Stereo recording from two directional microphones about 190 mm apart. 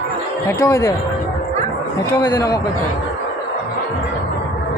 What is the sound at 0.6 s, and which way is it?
Speech, 15° left (ahead or behind).